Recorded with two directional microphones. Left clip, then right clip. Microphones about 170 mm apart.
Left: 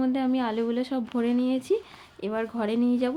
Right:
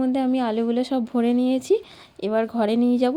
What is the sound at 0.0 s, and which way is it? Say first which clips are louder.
Speech: right 4 dB; 20° right (ahead or behind).